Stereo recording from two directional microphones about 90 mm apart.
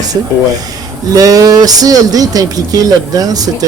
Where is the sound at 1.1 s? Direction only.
45° right (ahead or behind).